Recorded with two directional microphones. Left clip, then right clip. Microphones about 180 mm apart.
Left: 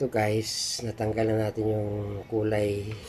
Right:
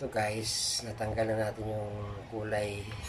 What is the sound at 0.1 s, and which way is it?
Speech, 40° left (ahead or behind).